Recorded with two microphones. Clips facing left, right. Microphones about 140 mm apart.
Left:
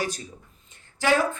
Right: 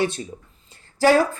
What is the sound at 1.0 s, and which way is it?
Speech, 35° right (ahead or behind).